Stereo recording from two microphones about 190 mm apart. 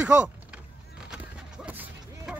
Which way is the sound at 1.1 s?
5° right (ahead or behind).